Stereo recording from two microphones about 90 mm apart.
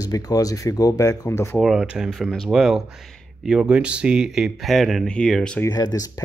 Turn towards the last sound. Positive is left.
turn(degrees=45)  # may be behind; listen again after turning